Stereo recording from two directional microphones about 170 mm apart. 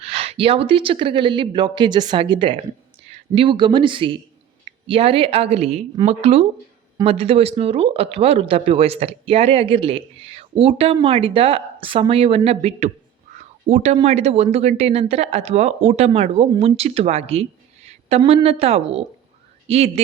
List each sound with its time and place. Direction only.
0.0 s speech: 35° right (ahead or behind)